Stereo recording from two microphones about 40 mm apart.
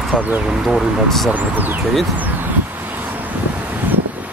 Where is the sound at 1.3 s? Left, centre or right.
Right.